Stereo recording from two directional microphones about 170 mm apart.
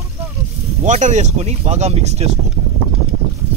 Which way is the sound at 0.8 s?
45° right (ahead or behind).